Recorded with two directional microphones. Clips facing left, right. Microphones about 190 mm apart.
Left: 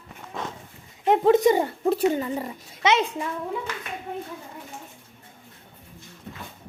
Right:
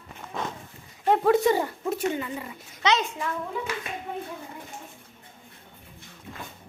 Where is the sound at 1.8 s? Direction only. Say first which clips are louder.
Left 6 dB; 35° left (ahead or behind).